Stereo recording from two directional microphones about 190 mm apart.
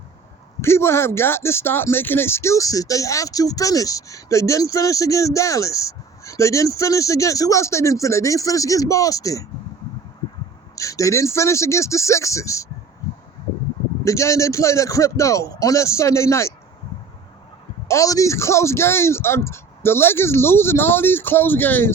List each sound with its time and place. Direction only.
0.6 s speech: 15° left (ahead or behind)
10.8 s speech: 15° left (ahead or behind)
14.0 s speech: 15° left (ahead or behind)
17.8 s speech: 15° left (ahead or behind)